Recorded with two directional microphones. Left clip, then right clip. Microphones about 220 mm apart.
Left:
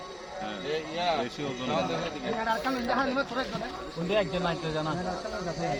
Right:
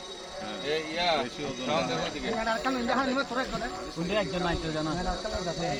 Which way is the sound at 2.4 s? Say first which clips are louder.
Even; 40° right (ahead or behind).